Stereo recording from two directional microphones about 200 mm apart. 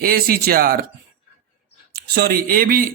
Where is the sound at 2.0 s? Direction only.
50° right (ahead or behind).